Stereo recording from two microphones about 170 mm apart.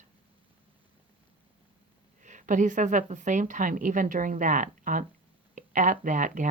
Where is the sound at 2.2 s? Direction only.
45° right (ahead or behind).